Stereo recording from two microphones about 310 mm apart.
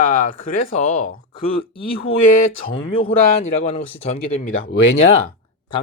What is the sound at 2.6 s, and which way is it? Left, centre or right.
Speech, centre.